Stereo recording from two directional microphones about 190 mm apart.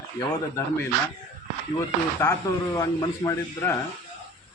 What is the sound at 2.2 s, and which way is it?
A man's voice, 15° left (ahead or behind).